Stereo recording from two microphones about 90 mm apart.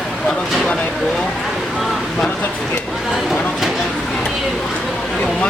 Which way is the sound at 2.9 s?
Centre (ahead or behind).